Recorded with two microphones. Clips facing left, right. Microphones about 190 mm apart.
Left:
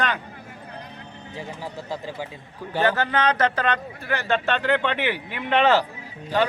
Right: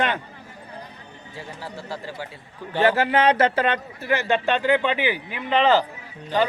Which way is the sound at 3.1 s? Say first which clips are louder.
Right 3 dB; 25° right (ahead or behind).